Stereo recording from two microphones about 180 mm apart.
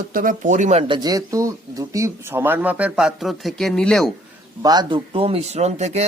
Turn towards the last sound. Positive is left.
turn(degrees=-40)  # may be behind; listen again after turning